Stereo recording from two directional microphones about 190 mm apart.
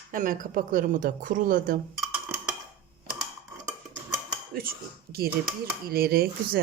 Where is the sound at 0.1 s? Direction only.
45° right (ahead or behind).